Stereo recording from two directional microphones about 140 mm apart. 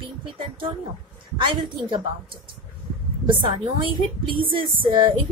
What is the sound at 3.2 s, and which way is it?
A woman's voice, 35° right (ahead or behind).